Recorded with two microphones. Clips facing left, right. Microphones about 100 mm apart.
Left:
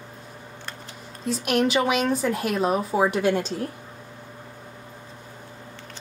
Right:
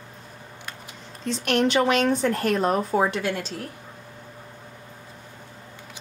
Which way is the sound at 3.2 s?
15° left (ahead or behind).